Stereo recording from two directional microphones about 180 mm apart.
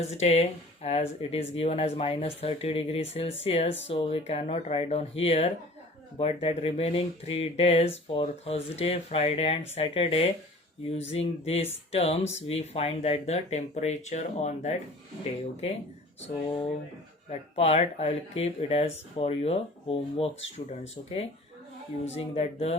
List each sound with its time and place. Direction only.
0.1 s speech: 35° left (ahead or behind)
17.2 s speech: 35° left (ahead or behind)